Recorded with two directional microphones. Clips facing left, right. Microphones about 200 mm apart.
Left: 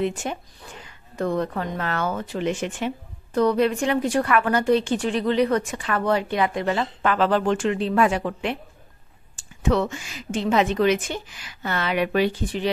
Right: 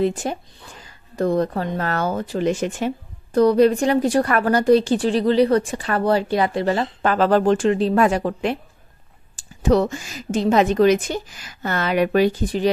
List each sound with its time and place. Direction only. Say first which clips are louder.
0.0 s a woman's voice: right 4 dB; 35° right (ahead or behind)